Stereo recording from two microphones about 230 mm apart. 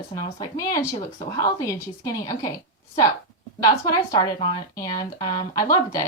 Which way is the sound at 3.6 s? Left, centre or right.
Centre.